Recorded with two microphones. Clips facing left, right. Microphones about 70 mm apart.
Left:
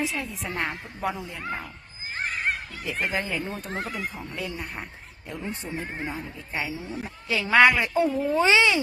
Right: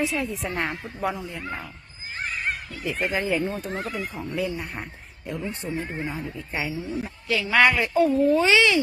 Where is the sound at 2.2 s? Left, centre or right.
Left.